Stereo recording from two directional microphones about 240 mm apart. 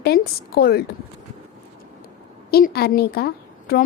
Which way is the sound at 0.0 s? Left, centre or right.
Left.